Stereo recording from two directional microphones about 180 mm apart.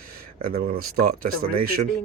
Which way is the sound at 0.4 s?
55° right (ahead or behind).